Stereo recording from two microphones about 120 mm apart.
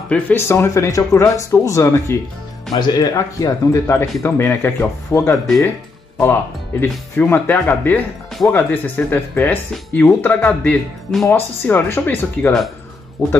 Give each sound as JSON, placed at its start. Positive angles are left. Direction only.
{"t": 0.1, "sound": "speech", "side_deg": 20}
{"t": 6.8, "sound": "speech", "side_deg": 15}